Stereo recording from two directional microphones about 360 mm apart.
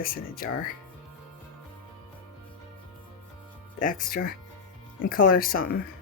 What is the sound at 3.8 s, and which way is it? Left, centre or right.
Speech, left.